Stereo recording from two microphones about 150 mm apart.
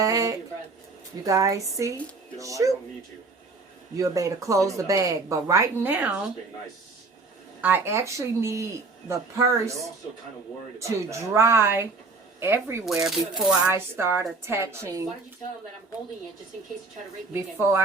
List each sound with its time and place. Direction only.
0.0 s a woman's voice: 20° right (ahead or behind)
3.9 s a woman's voice: 20° right (ahead or behind)
7.6 s a woman's voice: 15° right (ahead or behind)
10.8 s speech: 20° right (ahead or behind)
12.8 s speech: 5° right (ahead or behind)
13.7 s speech: 15° right (ahead or behind)
17.3 s speech: 15° right (ahead or behind)